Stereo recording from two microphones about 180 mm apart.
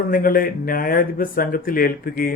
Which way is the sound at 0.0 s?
50° left (ahead or behind).